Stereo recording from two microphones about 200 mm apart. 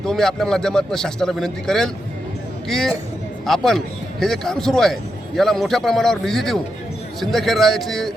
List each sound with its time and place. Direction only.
0.0 s a man's voice: centre (ahead or behind)